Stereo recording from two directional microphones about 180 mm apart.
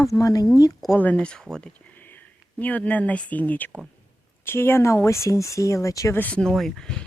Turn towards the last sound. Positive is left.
turn(degrees=5)  # may be behind; listen again after turning